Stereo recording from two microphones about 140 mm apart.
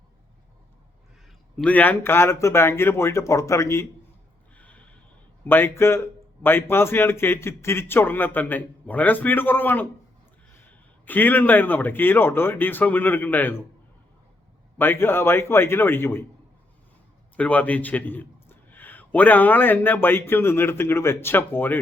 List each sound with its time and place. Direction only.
1.5 s speech: 10° left (ahead or behind)
4.5 s snort: 10° left (ahead or behind)
5.5 s a man's voice: 15° left (ahead or behind)
14.8 s a man's voice: 15° left (ahead or behind)
17.3 s a man's voice: 10° left (ahead or behind)